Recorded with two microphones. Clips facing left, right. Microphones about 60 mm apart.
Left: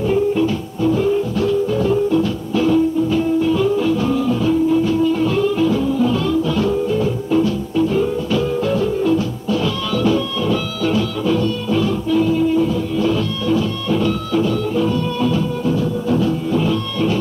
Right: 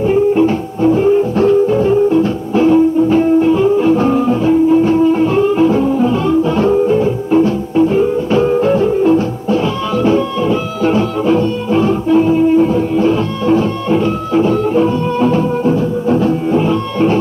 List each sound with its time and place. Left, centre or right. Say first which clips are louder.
0.0 s music: right 5 dB; right